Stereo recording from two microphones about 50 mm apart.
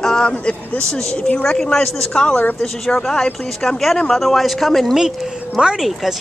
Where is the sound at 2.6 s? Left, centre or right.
Centre.